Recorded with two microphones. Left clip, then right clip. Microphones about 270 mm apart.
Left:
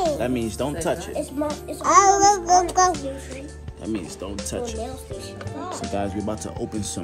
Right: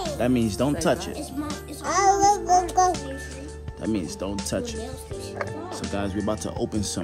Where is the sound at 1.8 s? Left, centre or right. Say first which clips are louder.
Left 4 dB; left.